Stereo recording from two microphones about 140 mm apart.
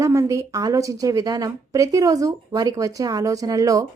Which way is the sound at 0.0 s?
20° right (ahead or behind).